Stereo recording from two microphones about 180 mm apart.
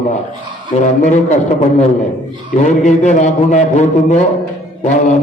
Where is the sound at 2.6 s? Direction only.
40° left (ahead or behind).